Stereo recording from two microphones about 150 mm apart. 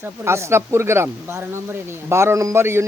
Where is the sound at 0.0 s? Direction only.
20° right (ahead or behind).